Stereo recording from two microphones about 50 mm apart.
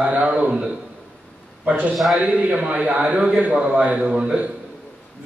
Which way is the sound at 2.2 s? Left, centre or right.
Right.